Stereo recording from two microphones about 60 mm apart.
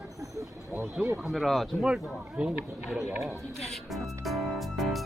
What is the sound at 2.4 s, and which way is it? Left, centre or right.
Speech, centre.